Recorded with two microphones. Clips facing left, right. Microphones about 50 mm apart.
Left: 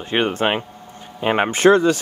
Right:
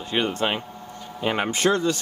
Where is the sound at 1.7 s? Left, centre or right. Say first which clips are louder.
Left 9 dB; left.